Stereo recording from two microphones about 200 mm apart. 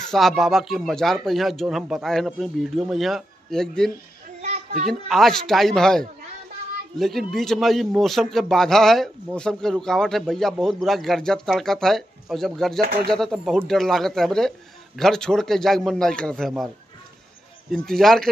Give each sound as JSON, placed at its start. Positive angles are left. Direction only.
{"t": 0.0, "sound": "a man's voice", "side_deg": 0}
{"t": 4.4, "sound": "a sound", "side_deg": -35}
{"t": 4.8, "sound": "a man's voice", "side_deg": 0}
{"t": 17.6, "sound": "a man's voice", "side_deg": 0}